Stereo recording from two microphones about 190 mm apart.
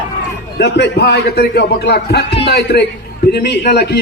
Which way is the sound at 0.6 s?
60° left (ahead or behind).